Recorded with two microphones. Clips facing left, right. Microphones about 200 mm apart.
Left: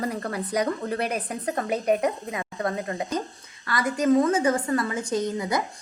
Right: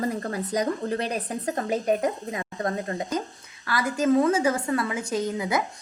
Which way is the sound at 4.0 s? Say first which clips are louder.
Even; 5° right (ahead or behind).